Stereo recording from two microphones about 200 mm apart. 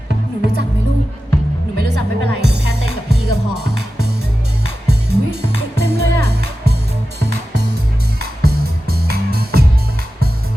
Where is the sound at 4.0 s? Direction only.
55° right (ahead or behind).